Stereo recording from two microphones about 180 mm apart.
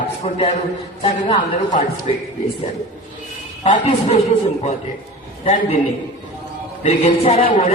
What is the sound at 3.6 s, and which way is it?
Speech, 40° left (ahead or behind).